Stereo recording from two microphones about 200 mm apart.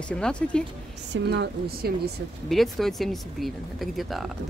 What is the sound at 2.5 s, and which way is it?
Speech, centre (ahead or behind).